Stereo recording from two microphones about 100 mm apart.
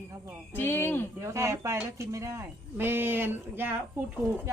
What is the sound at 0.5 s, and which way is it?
Speech, 20° left (ahead or behind).